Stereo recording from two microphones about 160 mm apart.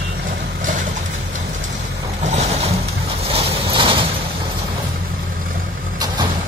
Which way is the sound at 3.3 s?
35° right (ahead or behind).